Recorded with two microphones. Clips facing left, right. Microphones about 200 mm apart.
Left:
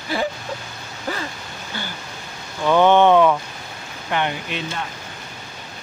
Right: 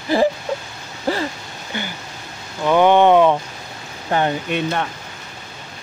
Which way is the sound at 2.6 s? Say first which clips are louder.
Right 1 dB; 15° right (ahead or behind).